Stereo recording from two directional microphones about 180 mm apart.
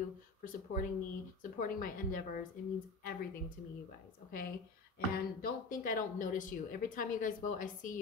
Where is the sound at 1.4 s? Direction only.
50° left (ahead or behind).